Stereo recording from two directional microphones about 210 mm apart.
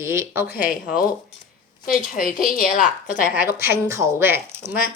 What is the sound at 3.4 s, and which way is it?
Speech, 10° right (ahead or behind).